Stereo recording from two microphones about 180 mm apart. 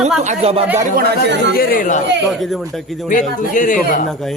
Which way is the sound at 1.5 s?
55° left (ahead or behind).